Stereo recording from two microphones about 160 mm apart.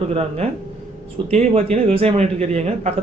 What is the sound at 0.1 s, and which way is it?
A man's voice, 40° right (ahead or behind).